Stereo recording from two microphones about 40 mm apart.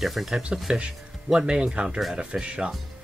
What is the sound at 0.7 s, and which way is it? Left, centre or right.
Speech, right.